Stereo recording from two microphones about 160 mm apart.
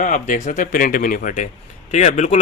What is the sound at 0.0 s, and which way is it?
Speech, 50° left (ahead or behind).